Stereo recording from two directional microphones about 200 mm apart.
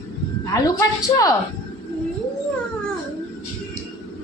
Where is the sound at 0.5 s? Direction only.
15° left (ahead or behind).